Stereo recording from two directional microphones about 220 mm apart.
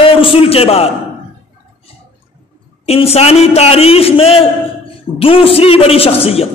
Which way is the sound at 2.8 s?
30° left (ahead or behind).